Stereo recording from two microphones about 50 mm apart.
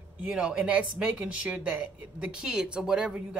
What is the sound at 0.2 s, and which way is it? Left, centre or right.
Speech, centre.